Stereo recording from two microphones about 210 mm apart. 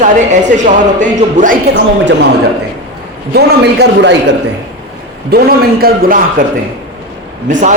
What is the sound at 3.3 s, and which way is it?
A man's voice, 50° right (ahead or behind).